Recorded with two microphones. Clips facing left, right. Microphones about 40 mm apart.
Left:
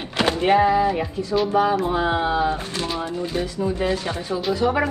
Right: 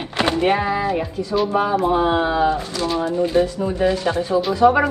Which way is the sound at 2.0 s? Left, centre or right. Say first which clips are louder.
Right 3 dB; right.